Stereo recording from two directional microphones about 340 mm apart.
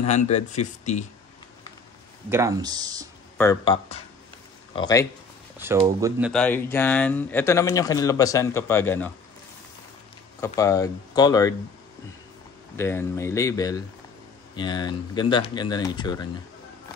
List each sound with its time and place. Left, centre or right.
0.0 s speech: centre
2.2 s speech: centre
3.3 s speech: centre
5.6 s speech: centre
10.4 s speech: centre
12.7 s speech: centre